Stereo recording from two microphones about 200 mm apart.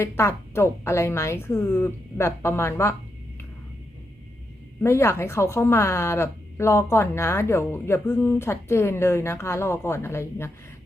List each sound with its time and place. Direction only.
0.0 s speech: 15° left (ahead or behind)
4.8 s speech: 15° left (ahead or behind)